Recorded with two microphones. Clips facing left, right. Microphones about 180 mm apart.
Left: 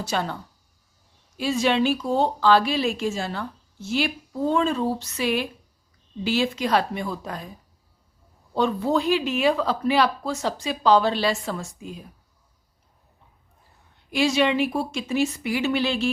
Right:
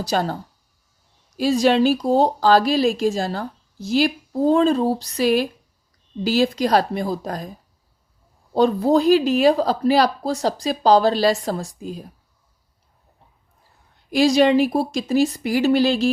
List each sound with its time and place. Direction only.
0.0 s speech: 35° right (ahead or behind)
1.4 s speech: 40° right (ahead or behind)
8.5 s speech: 35° right (ahead or behind)
14.1 s speech: 40° right (ahead or behind)